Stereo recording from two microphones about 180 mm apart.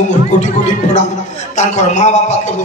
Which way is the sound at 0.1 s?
40° left (ahead or behind).